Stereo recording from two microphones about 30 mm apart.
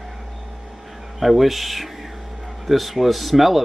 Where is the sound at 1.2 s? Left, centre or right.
Centre.